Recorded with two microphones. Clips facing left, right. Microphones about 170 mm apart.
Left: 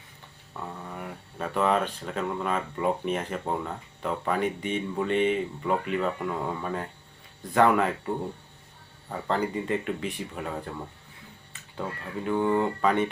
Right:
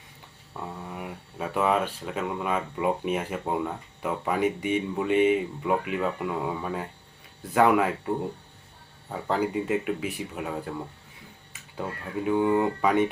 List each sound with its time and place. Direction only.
0.9 s speech: 5° right (ahead or behind)
12.2 s speech: 10° right (ahead or behind)